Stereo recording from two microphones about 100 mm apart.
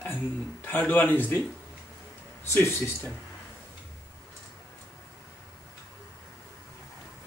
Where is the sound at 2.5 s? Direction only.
25° left (ahead or behind).